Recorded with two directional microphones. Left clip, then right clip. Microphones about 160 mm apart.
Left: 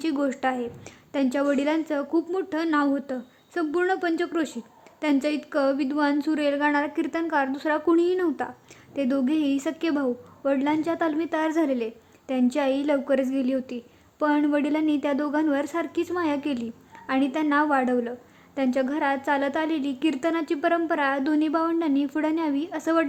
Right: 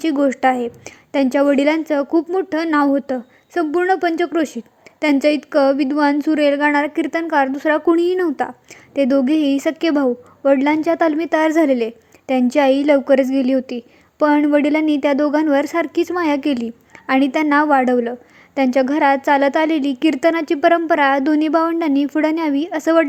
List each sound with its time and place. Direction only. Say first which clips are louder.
0.0 s a woman's voice: right 10 dB; 25° right (ahead or behind)